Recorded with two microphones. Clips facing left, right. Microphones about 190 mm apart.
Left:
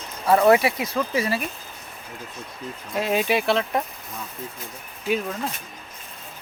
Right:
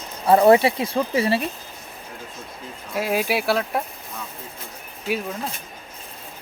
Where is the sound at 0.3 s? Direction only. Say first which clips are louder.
Right 3 dB; 25° right (ahead or behind).